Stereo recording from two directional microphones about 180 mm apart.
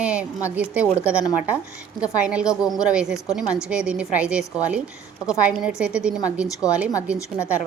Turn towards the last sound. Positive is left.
turn(degrees=-5)  # may be behind; listen again after turning